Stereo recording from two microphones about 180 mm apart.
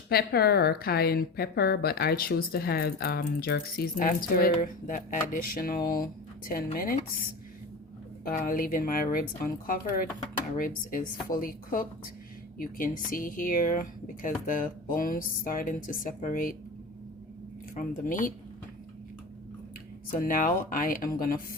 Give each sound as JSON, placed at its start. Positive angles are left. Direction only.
{"t": 0.1, "sound": "a woman's voice", "side_deg": 60}
{"t": 8.2, "sound": "speech", "side_deg": 50}
{"t": 17.7, "sound": "speech", "side_deg": 50}
{"t": 20.1, "sound": "speech", "side_deg": 50}